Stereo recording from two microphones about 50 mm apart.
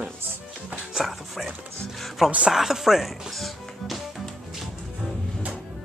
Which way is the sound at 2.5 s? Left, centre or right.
Centre.